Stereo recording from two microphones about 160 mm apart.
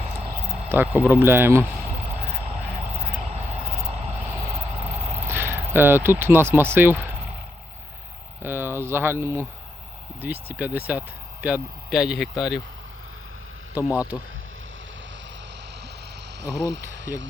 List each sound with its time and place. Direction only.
0.7 s speech: 10° right (ahead or behind)
5.3 s speech: 15° right (ahead or behind)
8.4 s speech: 15° right (ahead or behind)
13.8 s speech: 10° right (ahead or behind)
14.1 s speech: 25° left (ahead or behind)
16.4 s speech: 90° right